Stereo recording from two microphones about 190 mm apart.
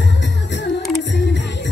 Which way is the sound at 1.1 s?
70° left (ahead or behind).